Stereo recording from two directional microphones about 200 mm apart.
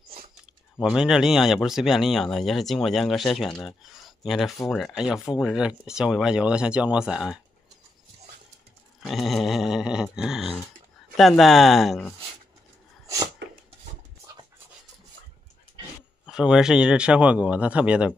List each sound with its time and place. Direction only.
0.7 s speech: 5° right (ahead or behind)
9.0 s speech: centre (ahead or behind)
13.0 s sneeze: 15° right (ahead or behind)
16.3 s speech: 5° right (ahead or behind)